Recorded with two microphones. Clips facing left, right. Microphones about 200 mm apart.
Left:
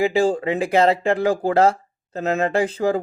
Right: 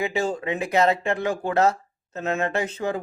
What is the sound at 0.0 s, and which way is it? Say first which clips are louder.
Speech: left 7 dB; 30° left (ahead or behind).